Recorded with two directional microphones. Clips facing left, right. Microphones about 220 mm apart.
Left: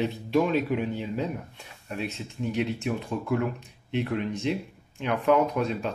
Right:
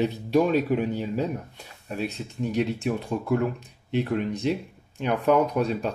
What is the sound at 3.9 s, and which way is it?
Speech, 40° right (ahead or behind).